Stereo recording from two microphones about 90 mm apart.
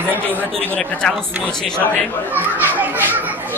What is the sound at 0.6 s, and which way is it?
Speech, 20° left (ahead or behind).